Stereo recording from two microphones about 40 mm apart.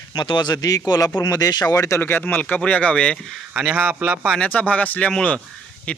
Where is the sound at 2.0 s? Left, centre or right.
Left.